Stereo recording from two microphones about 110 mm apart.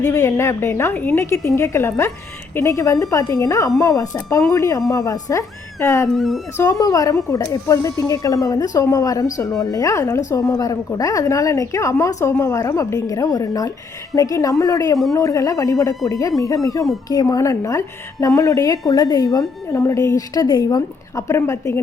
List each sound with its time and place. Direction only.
0.1 s a woman's voice: 25° left (ahead or behind)
6.1 s speech: centre (ahead or behind)
6.7 s a woman's voice: 35° left (ahead or behind)